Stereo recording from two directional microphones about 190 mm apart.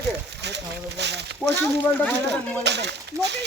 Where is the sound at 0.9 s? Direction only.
65° right (ahead or behind).